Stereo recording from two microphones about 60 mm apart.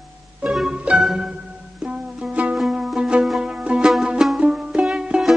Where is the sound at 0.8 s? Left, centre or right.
Right.